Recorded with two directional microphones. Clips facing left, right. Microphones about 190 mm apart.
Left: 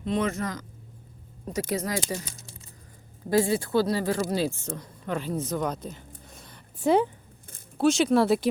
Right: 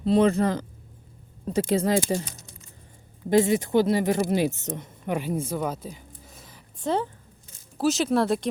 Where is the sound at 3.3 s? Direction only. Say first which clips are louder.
Right 3 dB; 20° right (ahead or behind); by 6.6 s 5° right (ahead or behind).